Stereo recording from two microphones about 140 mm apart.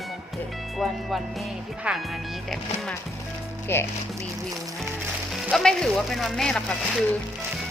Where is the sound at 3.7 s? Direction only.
15° left (ahead or behind).